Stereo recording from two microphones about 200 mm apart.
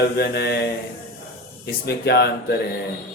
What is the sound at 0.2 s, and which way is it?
Mantra, 55° left (ahead or behind).